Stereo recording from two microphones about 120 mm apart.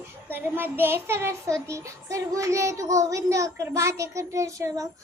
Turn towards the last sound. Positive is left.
turn(degrees=-30)  # may be behind; listen again after turning